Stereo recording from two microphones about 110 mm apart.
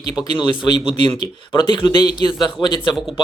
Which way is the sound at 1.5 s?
45° left (ahead or behind).